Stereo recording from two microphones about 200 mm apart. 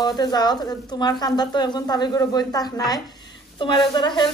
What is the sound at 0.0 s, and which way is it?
Speech, 20° left (ahead or behind).